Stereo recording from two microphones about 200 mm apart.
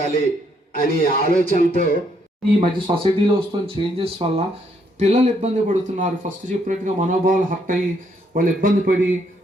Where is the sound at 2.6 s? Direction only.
25° right (ahead or behind); by 9.0 s 45° right (ahead or behind).